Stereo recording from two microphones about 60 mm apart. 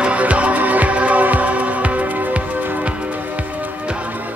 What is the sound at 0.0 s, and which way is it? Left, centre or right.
Music, right.